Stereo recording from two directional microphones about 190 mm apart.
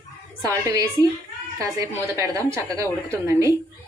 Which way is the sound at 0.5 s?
20° right (ahead or behind).